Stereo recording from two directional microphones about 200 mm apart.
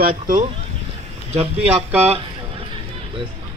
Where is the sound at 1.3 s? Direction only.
30° right (ahead or behind).